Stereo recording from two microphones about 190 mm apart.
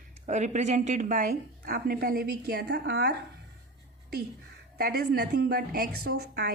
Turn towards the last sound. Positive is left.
turn(degrees=-55)  # may be behind; listen again after turning